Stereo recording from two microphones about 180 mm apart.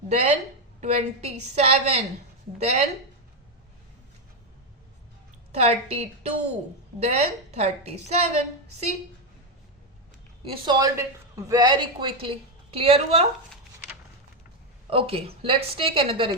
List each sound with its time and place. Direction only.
0.1 s a woman's voice: 35° right (ahead or behind)
5.5 s a woman's voice: 35° right (ahead or behind)
10.4 s a man's voice: 25° right (ahead or behind)
14.8 s a woman's voice: 30° right (ahead or behind)